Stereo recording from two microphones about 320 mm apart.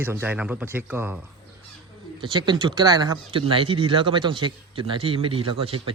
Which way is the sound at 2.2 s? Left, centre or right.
Centre.